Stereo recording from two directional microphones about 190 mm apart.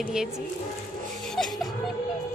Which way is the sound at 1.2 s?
Centre (ahead or behind).